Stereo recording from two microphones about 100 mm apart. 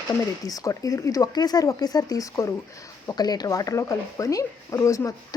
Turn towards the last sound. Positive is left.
turn(degrees=30)  # may be behind; listen again after turning